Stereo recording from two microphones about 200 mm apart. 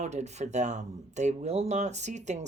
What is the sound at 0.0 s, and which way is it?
Speech, 35° right (ahead or behind).